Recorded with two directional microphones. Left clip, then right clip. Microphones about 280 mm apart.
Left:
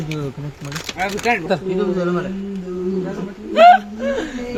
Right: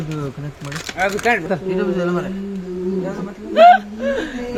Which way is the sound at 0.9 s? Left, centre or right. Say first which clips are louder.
Right 2 dB; right.